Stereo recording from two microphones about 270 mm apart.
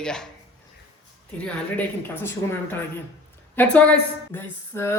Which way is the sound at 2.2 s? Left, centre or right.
Centre.